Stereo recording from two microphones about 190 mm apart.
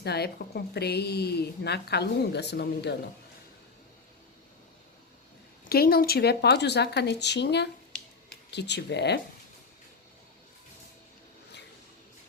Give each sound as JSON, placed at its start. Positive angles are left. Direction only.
{"t": 0.0, "sound": "a woman's voice", "side_deg": 55}
{"t": 5.6, "sound": "a woman's voice", "side_deg": 55}